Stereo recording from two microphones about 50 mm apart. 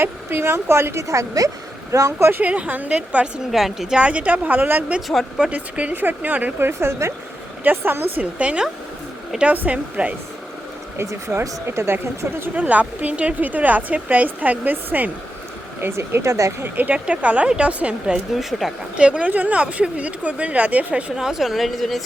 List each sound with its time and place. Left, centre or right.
0.0 s a woman's voice: right
2.4 s speech: right
3.5 s speech: centre
3.9 s a woman's voice: right
6.6 s a woman's voice: right
7.6 s a woman's voice: right
8.2 s speech: right
11.3 s a woman's voice: right
12.5 s a woman's voice: right
15.8 s speech: right
16.7 s speech: right
18.1 s speech: centre
18.9 s speech: right
21.2 s speech: centre